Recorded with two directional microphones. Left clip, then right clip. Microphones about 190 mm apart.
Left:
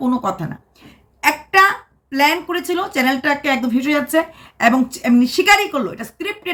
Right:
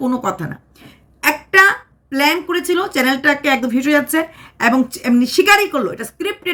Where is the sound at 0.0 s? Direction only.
15° right (ahead or behind).